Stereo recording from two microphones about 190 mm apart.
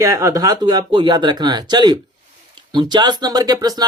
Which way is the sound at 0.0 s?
15° right (ahead or behind).